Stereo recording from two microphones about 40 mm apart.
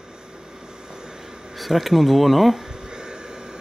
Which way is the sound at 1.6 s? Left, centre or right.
Centre.